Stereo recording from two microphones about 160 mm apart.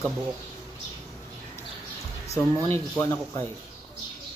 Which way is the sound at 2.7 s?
15° left (ahead or behind).